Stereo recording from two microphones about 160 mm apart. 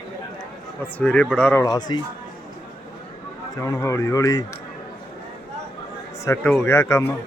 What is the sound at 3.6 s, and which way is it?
Speech, 20° left (ahead or behind).